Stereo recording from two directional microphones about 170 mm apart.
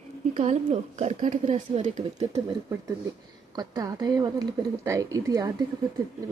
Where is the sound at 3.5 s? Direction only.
20° right (ahead or behind).